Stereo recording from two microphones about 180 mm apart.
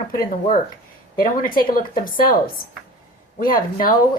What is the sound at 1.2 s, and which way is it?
A woman's voice, 50° left (ahead or behind).